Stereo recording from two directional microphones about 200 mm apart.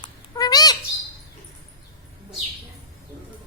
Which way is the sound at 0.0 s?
20° left (ahead or behind).